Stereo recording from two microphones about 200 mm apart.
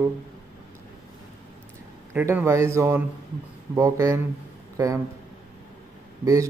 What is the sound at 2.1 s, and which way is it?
A man's voice, 10° right (ahead or behind).